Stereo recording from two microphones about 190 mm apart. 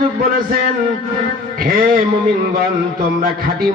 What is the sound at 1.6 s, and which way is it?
Speech, 50° right (ahead or behind).